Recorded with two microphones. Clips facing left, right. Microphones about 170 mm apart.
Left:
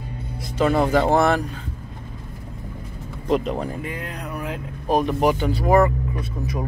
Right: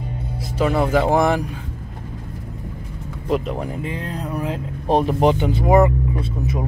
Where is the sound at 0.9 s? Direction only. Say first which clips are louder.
Right 1 dB; 10° right (ahead or behind).